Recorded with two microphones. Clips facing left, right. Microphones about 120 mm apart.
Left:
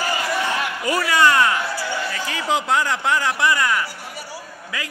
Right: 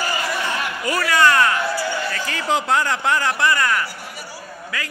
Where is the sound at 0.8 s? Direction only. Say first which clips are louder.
Even; 20° left (ahead or behind).